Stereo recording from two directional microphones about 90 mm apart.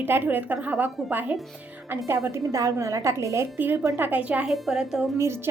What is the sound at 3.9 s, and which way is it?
Speech, 20° right (ahead or behind).